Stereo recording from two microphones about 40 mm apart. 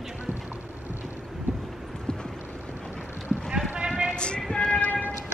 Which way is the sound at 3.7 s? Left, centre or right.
Right.